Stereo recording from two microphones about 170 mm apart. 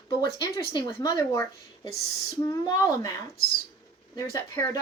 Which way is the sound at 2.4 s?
20° left (ahead or behind).